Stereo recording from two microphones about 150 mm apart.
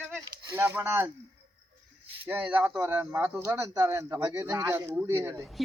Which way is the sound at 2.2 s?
10° right (ahead or behind).